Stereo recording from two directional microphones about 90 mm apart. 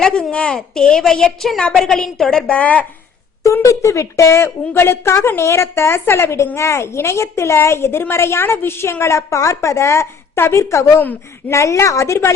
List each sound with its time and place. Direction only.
0.0 s a woman's voice: 10° left (ahead or behind)
2.5 s speech: 15° left (ahead or behind)
3.4 s a woman's voice: 35° left (ahead or behind)
11.0 s a woman's voice: 20° left (ahead or behind)
11.5 s a woman's voice: 35° left (ahead or behind)